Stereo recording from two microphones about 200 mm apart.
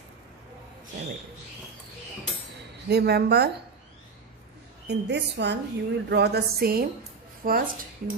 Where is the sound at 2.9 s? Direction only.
55° right (ahead or behind).